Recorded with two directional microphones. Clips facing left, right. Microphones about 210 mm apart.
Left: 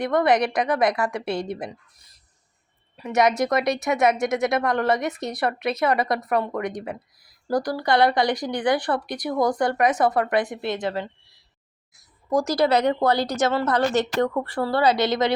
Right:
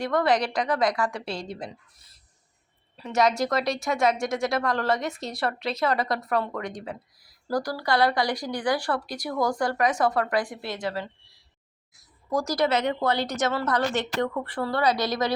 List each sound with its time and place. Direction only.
0.0 s speech: 20° left (ahead or behind)
2.9 s speech: 15° left (ahead or behind)
12.3 s speech: 20° left (ahead or behind)
12.5 s a woman's voice: 40° left (ahead or behind)
13.9 s a woman's voice: 45° left (ahead or behind); by 15.3 s 25° left (ahead or behind)